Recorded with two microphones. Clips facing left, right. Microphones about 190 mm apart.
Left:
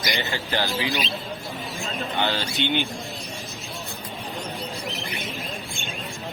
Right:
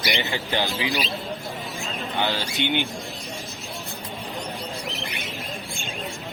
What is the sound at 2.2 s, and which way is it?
Speech, 10° right (ahead or behind).